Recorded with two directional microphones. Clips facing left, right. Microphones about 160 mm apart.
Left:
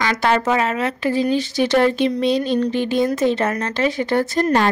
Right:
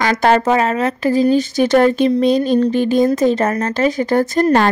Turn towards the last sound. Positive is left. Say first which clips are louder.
# right 4 dB
turn(degrees=-50)  # may be behind; listen again after turning